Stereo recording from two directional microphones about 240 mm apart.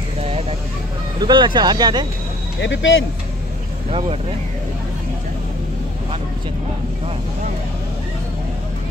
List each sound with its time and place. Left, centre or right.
0.2 s vehicle: right
1.2 s speech: centre
2.6 s speech: left